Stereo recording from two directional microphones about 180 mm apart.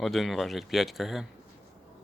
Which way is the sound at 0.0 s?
Centre (ahead or behind).